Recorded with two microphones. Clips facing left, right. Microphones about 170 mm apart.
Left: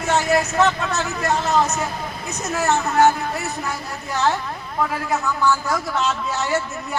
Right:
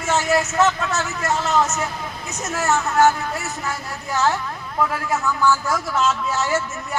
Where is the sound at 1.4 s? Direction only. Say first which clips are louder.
Even; 15° left (ahead or behind).